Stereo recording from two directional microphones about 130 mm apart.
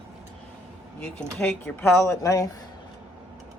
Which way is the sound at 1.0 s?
10° left (ahead or behind).